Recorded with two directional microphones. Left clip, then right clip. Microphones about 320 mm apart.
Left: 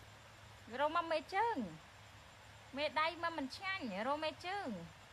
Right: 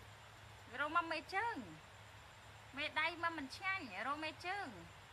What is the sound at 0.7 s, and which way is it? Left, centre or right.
Speech, left.